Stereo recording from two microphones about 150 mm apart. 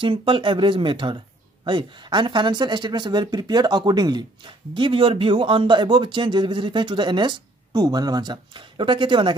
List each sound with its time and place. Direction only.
0.0 s speech: 35° right (ahead or behind)